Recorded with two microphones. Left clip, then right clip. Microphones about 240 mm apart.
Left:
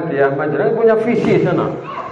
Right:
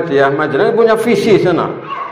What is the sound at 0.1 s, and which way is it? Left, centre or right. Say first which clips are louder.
A man's voice: right 3 dB; right.